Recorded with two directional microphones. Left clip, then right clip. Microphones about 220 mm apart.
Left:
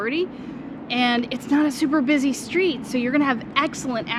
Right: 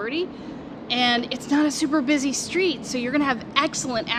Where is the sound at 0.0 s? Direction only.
30° left (ahead or behind).